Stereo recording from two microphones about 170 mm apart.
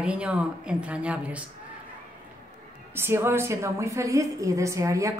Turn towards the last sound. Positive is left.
turn(degrees=-20)  # may be behind; listen again after turning